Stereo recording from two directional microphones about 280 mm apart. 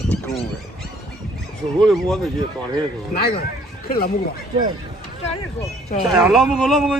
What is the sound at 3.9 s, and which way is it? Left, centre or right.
Speech, left.